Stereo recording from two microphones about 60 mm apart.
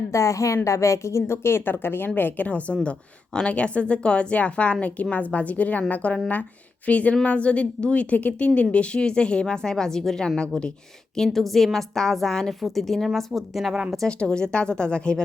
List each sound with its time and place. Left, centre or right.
0.1 s a woman's voice: left; by 10.7 s centre
11.2 s a woman's voice: centre
14.1 s a woman's voice: centre